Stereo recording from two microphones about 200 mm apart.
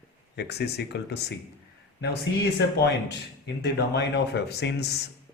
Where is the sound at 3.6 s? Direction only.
60° left (ahead or behind).